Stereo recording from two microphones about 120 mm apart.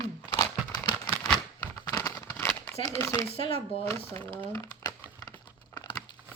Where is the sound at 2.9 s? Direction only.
25° left (ahead or behind).